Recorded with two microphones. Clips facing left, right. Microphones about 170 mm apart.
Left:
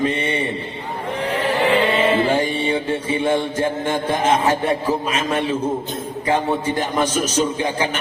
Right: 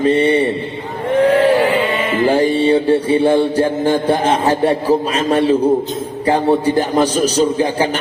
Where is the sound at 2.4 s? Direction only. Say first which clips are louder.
Right 8 dB; 35° right (ahead or behind).